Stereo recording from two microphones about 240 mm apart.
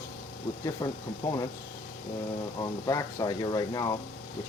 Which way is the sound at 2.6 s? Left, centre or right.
Centre.